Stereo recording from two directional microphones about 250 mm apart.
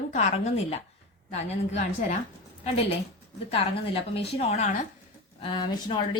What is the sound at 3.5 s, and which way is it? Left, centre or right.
Speech, left.